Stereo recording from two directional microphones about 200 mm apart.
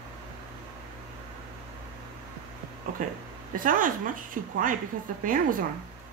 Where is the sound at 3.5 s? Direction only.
40° right (ahead or behind).